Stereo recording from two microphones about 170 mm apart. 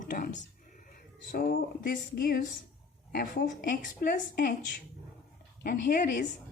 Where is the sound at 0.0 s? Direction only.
50° left (ahead or behind).